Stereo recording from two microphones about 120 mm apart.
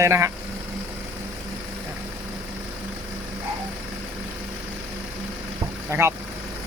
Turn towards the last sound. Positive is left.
turn(degrees=-20)  # may be behind; listen again after turning